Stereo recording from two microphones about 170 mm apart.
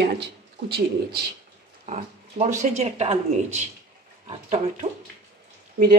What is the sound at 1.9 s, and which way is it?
Speech, 45° right (ahead or behind).